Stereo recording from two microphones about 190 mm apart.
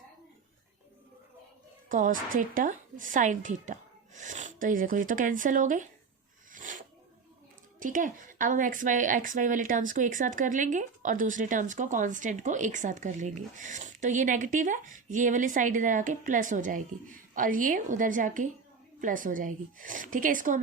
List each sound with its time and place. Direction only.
1.9 s a woman's voice: 45° right (ahead or behind)
6.5 s snake: 45° right (ahead or behind)
7.8 s a woman's voice: 45° right (ahead or behind)